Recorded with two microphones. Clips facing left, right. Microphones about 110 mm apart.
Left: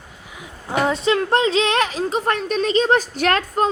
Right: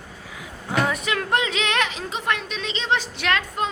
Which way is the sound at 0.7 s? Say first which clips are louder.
Left 5 dB; 25° left (ahead or behind).